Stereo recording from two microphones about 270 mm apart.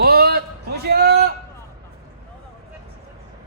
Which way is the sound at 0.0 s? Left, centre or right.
Right.